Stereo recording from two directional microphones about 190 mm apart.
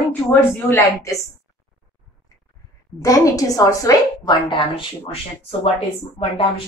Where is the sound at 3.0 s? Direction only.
20° left (ahead or behind).